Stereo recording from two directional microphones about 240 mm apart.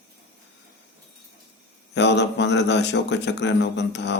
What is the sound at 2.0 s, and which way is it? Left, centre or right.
Speech, left.